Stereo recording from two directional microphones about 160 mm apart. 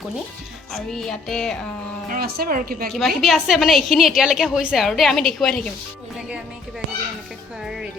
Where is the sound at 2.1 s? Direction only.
65° right (ahead or behind).